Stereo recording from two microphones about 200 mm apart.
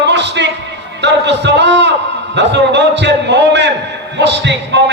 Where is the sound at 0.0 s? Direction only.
60° right (ahead or behind).